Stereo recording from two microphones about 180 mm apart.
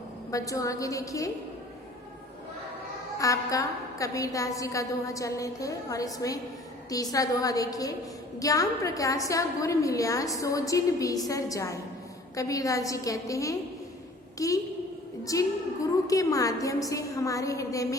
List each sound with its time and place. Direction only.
0.3 s a woman's voice: 20° left (ahead or behind)
3.2 s a woman's voice: 20° left (ahead or behind)